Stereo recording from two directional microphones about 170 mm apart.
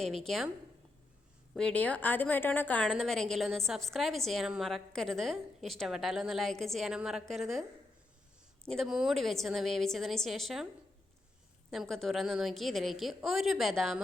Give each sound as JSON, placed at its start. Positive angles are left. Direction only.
{"t": 0.0, "sound": "a woman's voice", "side_deg": 0}
{"t": 1.5, "sound": "a woman's voice", "side_deg": 5}
{"t": 8.6, "sound": "a woman's voice", "side_deg": 0}
{"t": 11.7, "sound": "a woman's voice", "side_deg": 0}